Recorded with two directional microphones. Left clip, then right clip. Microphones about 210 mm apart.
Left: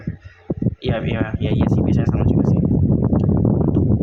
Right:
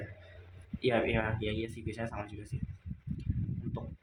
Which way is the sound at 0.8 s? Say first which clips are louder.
Left 4 dB; 35° left (ahead or behind).